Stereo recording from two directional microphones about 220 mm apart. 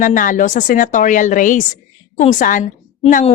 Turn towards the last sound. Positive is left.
turn(degrees=30)  # may be behind; listen again after turning